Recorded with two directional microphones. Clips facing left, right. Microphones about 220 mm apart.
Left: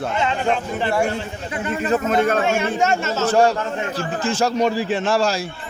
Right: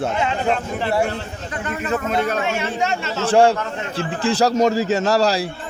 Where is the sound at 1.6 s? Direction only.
30° left (ahead or behind).